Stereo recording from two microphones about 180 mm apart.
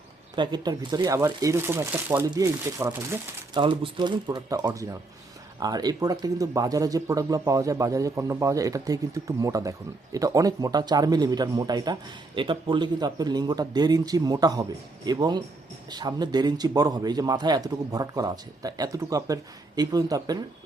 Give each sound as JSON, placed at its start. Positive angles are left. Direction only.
{"t": 0.3, "sound": "speech", "side_deg": -25}
{"t": 3.6, "sound": "speech", "side_deg": -25}